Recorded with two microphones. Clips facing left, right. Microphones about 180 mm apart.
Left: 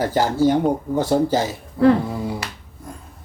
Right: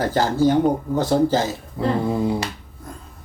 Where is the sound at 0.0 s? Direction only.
10° left (ahead or behind).